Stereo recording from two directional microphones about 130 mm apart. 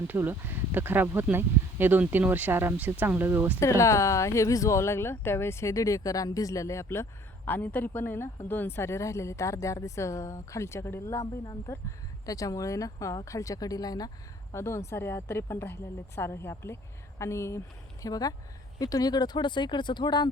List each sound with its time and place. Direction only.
0.1 s speech: 15° right (ahead or behind)
3.6 s speech: 25° left (ahead or behind)